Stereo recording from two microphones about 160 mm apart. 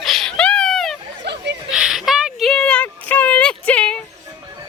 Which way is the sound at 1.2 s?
90° right.